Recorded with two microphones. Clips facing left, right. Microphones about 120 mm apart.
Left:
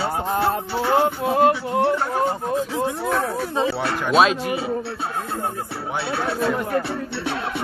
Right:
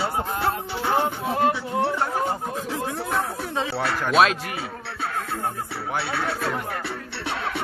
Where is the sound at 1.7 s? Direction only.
15° left (ahead or behind).